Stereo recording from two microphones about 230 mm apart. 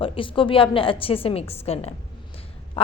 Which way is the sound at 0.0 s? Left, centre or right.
Left.